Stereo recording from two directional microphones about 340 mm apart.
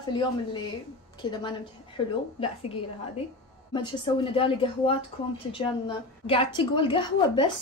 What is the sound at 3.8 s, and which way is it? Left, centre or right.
A woman's voice, centre.